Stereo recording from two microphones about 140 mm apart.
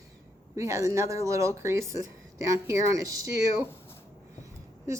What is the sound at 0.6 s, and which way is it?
Speech, 20° right (ahead or behind).